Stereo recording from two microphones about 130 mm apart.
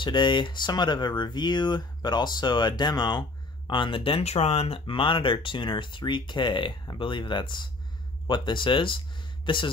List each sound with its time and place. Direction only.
0.0 s speech: 35° left (ahead or behind)